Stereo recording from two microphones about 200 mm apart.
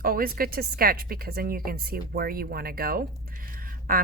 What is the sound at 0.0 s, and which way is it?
A woman's voice, 45° right (ahead or behind).